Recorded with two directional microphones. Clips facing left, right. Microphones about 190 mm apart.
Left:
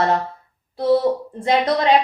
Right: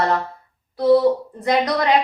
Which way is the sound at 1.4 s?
25° left (ahead or behind).